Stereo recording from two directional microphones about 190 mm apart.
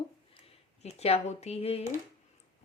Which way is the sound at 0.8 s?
30° left (ahead or behind).